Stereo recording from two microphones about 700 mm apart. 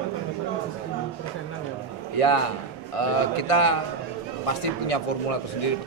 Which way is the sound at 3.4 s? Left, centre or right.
Left.